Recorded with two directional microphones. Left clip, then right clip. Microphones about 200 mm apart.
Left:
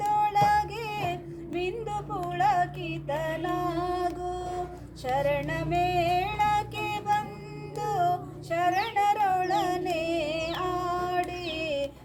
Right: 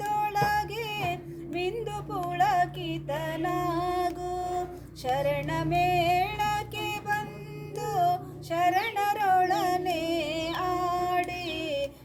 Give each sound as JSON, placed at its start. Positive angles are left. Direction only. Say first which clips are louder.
{"t": 0.2, "sound": "music", "louder": "left 3 dB", "side_deg": -20}
{"t": 5.1, "sound": "music", "louder": "left 1 dB", "side_deg": -20}